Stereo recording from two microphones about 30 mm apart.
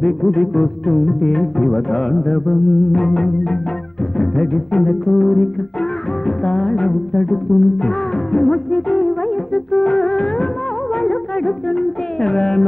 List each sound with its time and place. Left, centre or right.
0.0 s music: centre